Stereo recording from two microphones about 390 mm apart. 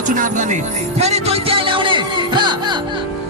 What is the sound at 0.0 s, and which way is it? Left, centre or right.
Speech, centre.